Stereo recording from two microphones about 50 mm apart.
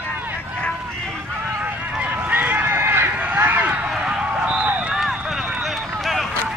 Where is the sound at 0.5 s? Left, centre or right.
Centre.